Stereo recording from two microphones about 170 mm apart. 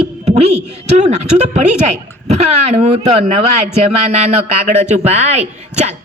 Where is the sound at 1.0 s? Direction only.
40° right (ahead or behind).